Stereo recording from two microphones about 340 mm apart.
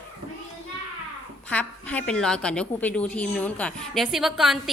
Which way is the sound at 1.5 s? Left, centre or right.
Centre.